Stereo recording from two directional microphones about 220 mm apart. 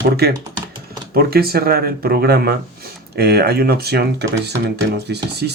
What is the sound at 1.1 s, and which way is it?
Speech, 45° right (ahead or behind).